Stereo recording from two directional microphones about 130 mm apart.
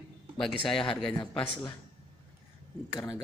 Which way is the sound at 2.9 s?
30° left (ahead or behind).